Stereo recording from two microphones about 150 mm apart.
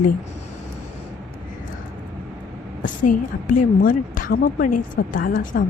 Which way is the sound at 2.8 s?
60° left (ahead or behind).